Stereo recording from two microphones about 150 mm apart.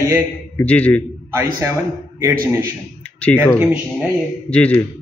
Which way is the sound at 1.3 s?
15° right (ahead or behind).